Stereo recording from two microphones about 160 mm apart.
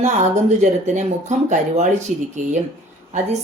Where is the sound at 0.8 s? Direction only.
45° right (ahead or behind).